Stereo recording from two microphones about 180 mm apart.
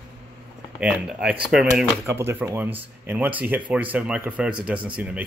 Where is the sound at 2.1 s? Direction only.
15° right (ahead or behind).